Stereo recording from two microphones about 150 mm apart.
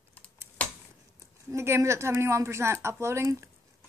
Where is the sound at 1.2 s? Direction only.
20° right (ahead or behind).